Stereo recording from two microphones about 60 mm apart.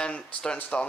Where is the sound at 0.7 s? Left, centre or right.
Left.